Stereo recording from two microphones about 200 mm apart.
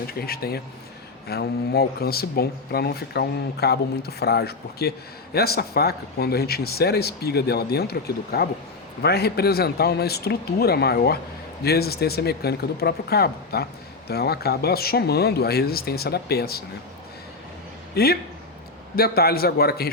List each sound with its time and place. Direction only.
0.1 s speech: 50° left (ahead or behind)
17.9 s speech: 50° left (ahead or behind)